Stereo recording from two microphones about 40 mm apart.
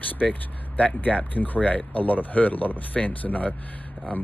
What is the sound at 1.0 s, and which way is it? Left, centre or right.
Speech, left.